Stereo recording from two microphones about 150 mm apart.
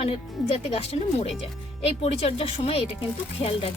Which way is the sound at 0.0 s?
40° left (ahead or behind).